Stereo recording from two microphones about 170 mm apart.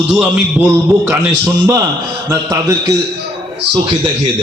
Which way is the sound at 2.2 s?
20° right (ahead or behind).